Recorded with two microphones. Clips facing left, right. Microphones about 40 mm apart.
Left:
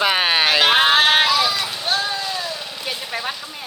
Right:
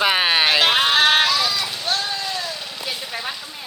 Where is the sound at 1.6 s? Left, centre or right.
Centre.